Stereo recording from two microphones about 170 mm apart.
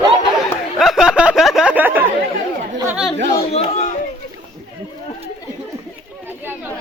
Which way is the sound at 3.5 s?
40° left (ahead or behind).